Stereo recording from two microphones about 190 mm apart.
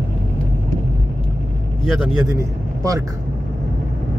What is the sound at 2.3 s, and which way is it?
Speech, 20° right (ahead or behind).